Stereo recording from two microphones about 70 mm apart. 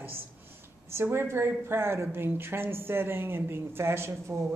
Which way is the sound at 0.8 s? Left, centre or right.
Right.